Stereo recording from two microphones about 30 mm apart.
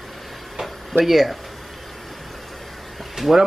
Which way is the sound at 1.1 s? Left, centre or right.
Centre.